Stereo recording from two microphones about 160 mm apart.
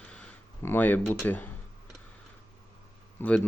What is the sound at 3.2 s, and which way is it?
Speech, 10° left (ahead or behind).